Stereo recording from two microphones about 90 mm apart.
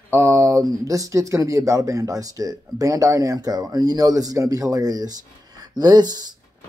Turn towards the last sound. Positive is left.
turn(degrees=-50)  # may be behind; listen again after turning